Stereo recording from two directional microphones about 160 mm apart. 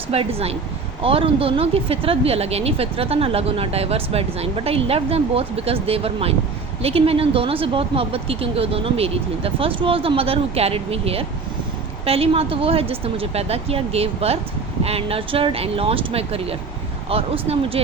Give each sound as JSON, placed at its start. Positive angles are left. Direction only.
{"t": 0.1, "sound": "speech", "side_deg": -35}